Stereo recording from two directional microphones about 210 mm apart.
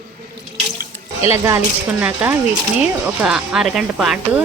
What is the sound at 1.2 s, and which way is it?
Speech, 15° right (ahead or behind).